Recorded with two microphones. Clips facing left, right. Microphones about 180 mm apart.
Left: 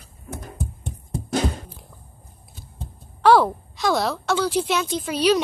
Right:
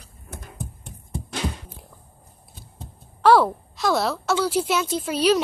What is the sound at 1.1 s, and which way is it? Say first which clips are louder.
Music: left 6 dB; 45° left (ahead or behind).